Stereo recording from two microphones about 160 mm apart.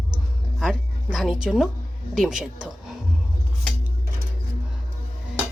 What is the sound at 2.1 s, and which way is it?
Speech, centre (ahead or behind).